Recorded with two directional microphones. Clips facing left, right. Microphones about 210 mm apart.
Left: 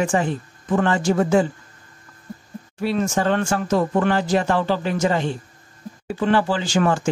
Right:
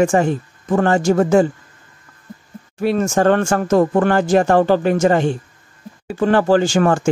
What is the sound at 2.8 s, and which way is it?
Speech, 50° right (ahead or behind).